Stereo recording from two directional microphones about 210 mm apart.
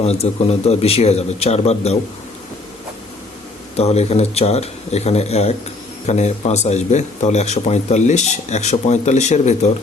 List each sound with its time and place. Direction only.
0.0 s a man's voice: 30° left (ahead or behind)
3.8 s speech: 30° left (ahead or behind)